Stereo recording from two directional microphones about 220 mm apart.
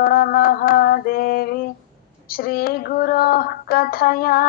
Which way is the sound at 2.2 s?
45° left (ahead or behind).